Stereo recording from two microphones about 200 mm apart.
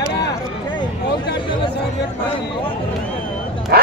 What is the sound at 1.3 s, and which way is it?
Chatter, 25° left (ahead or behind).